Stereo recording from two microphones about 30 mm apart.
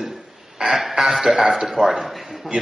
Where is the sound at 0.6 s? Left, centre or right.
Centre.